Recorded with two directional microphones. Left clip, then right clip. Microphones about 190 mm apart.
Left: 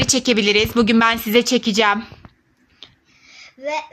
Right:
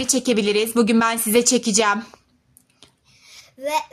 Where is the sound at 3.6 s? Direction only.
20° right (ahead or behind).